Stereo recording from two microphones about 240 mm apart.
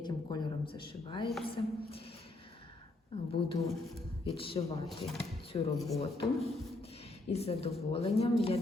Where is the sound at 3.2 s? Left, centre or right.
Left.